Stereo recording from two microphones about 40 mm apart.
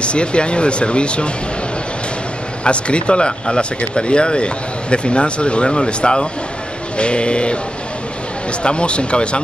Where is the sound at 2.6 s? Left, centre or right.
Left.